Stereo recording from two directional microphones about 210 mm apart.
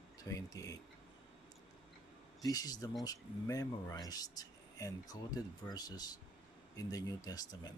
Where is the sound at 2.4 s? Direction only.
15° left (ahead or behind).